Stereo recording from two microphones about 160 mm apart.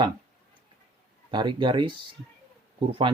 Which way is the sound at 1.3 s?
30° right (ahead or behind).